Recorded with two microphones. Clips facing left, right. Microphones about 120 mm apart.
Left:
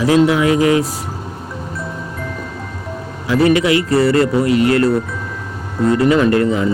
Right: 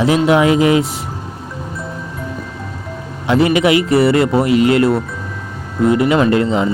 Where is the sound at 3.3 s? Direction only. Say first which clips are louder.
Right 1 dB; 20° right (ahead or behind).